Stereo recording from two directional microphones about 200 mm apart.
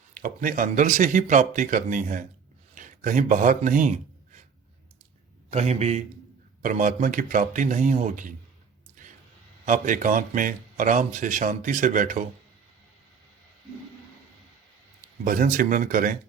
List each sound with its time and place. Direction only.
0.1 s speech: 45° right (ahead or behind)
5.5 s speech: 35° right (ahead or behind)
9.6 s speech: 40° right (ahead or behind)
15.2 s speech: 45° right (ahead or behind)